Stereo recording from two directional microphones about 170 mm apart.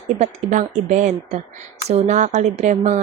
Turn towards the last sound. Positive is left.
turn(degrees=-45)  # may be behind; listen again after turning